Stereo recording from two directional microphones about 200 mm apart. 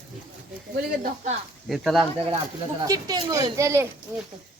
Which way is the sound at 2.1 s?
25° right (ahead or behind).